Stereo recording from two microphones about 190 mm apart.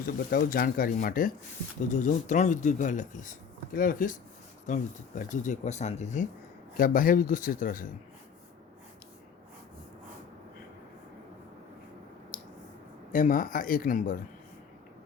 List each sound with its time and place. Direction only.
0.0 s speech: 50° left (ahead or behind)
13.1 s speech: 45° left (ahead or behind)